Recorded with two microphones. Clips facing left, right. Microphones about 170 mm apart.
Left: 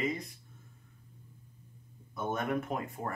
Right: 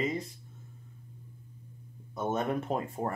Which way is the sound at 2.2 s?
30° right (ahead or behind).